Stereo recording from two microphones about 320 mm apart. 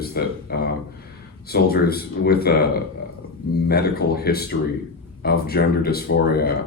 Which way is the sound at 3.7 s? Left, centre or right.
Left.